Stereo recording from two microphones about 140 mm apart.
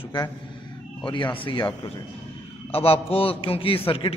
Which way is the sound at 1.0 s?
35° left (ahead or behind).